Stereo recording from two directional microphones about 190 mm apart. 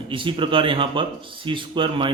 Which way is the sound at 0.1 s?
25° right (ahead or behind).